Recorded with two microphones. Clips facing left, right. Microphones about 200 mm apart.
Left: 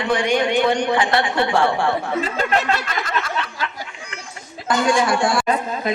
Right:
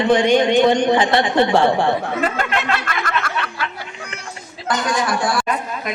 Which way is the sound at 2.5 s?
40° left (ahead or behind).